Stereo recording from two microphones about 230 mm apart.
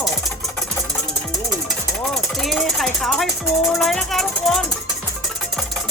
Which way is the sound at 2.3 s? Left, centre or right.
Centre.